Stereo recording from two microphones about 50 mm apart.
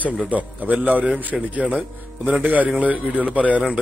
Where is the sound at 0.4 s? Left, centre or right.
Right.